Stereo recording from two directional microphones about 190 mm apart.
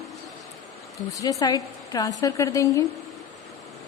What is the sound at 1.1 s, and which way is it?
A woman's voice, 15° left (ahead or behind).